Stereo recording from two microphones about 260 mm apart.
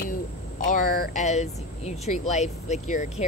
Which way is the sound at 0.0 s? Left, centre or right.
Left.